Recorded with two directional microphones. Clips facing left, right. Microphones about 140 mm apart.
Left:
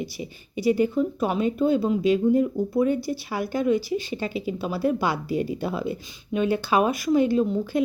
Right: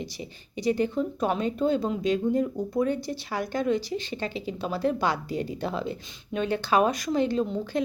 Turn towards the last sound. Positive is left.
turn(degrees=10)  # may be behind; listen again after turning